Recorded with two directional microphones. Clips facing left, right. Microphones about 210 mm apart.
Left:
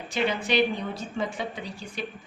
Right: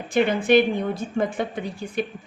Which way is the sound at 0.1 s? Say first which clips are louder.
Right 8 dB; 50° right (ahead or behind).